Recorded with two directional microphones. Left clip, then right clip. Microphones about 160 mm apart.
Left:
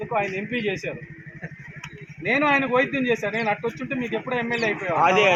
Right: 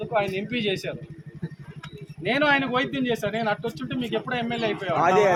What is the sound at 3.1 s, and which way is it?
Speech, 20° right (ahead or behind).